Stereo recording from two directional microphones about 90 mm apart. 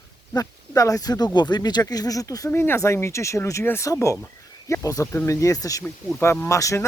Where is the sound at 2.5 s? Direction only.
25° left (ahead or behind).